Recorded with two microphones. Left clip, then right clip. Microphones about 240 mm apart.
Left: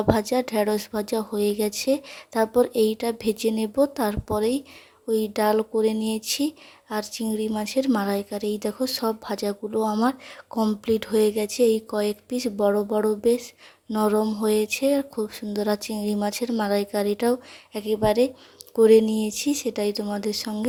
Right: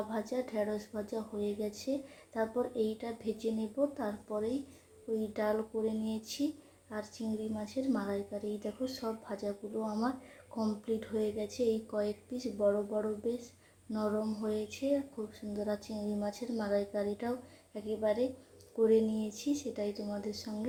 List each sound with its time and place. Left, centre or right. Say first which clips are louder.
0.1 s speech: left 14 dB; left